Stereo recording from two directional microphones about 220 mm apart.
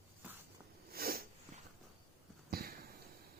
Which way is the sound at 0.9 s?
45° right (ahead or behind).